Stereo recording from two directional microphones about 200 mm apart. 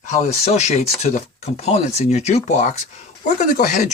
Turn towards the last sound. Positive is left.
turn(degrees=40)  # may be behind; listen again after turning